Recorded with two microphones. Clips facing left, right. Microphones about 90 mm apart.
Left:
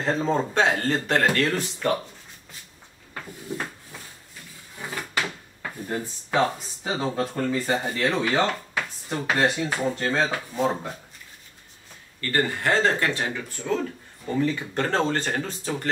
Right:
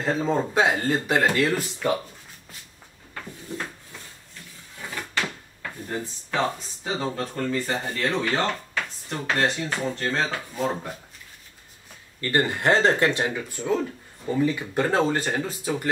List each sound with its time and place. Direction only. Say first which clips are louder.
0.0 s speech: even; 5° right (ahead or behind)
4.7 s speech: left 1 dB; 15° left (ahead or behind)
12.2 s speech: right 1 dB; 20° right (ahead or behind)